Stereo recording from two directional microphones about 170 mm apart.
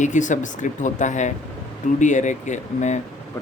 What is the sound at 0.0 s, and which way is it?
Speech, 45° left (ahead or behind).